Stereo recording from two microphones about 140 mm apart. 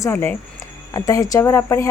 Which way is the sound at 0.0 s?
15° left (ahead or behind).